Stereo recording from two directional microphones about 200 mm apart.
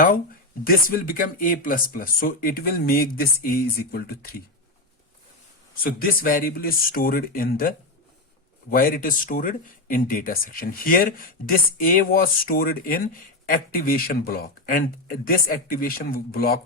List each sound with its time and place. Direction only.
0.6 s speech: 45° left (ahead or behind)
5.8 s speech: 45° left (ahead or behind)
8.7 s speech: 45° left (ahead or behind)